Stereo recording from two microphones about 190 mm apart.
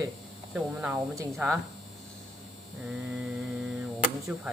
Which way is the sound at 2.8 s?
5° right (ahead or behind).